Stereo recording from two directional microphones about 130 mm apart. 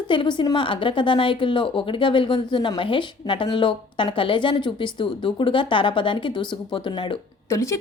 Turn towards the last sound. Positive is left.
turn(degrees=20)  # may be behind; listen again after turning